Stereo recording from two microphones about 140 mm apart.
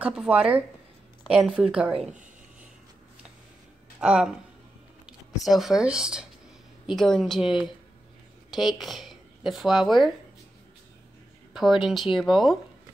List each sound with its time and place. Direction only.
0.0 s a woman's voice: 5° right (ahead or behind)
4.0 s a woman's voice: 5° right (ahead or behind)
11.5 s a woman's voice: centre (ahead or behind)